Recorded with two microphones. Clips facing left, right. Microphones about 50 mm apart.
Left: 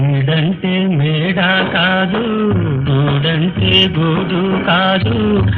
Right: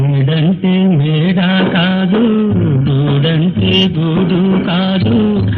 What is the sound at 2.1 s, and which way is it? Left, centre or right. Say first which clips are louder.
Beatboxing: right 5 dB; centre.